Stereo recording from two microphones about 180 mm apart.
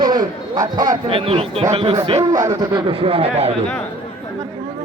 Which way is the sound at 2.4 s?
25° right (ahead or behind).